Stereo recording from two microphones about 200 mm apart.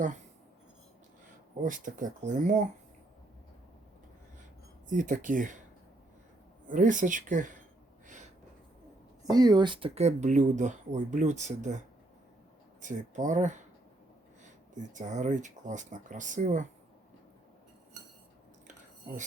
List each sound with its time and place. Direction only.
1.6 s speech: 40° right (ahead or behind)
4.9 s speech: 40° right (ahead or behind)
6.7 s speech: 40° right (ahead or behind)
9.3 s speech: 20° right (ahead or behind); by 11.8 s 35° right (ahead or behind)
12.8 s speech: 40° right (ahead or behind)
14.8 s speech: 40° right (ahead or behind)